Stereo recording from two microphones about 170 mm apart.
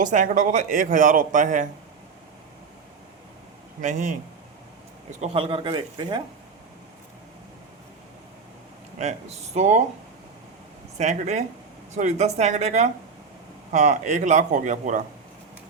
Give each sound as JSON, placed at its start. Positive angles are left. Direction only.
{"t": 0.0, "sound": "speech", "side_deg": -50}
{"t": 3.8, "sound": "speech", "side_deg": -45}
{"t": 5.2, "sound": "speech", "side_deg": -30}
{"t": 9.0, "sound": "speech", "side_deg": -40}
{"t": 10.9, "sound": "speech", "side_deg": -40}